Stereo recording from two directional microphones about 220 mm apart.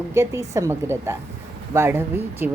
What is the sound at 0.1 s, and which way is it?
A woman's voice, 15° right (ahead or behind).